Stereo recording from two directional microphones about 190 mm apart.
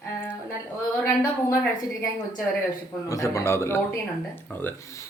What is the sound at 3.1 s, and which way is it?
Speech, 15° left (ahead or behind).